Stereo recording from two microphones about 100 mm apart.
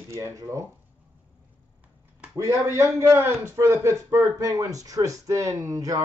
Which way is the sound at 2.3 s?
30° right (ahead or behind).